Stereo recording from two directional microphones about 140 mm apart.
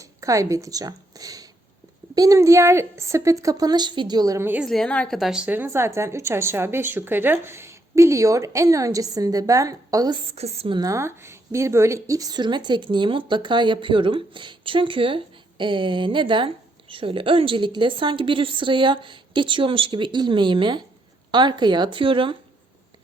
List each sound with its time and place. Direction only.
0.0 s a woman's voice: 25° right (ahead or behind)
4.6 s a woman's voice: 5° left (ahead or behind); by 10.2 s 25° right (ahead or behind)
10.2 s a woman's voice: 45° right (ahead or behind)
10.8 s a woman's voice: 25° right (ahead or behind)